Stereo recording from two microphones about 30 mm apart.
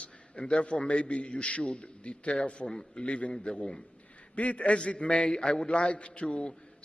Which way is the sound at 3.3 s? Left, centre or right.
Left.